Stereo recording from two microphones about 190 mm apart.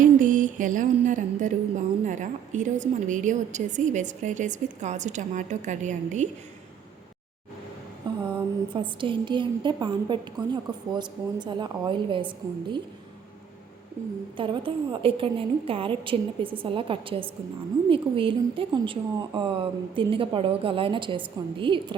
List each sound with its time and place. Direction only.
0.0 s mantra: 45° right (ahead or behind)
2.0 s a woman's voice: 40° right (ahead or behind)
8.1 s a sound: 25° right (ahead or behind)
8.7 s a woman's voice: 25° right (ahead or behind)
14.3 s a woman's voice: 25° right (ahead or behind)